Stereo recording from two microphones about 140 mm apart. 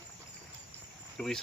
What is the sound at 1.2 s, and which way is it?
Speech, 10° left (ahead or behind).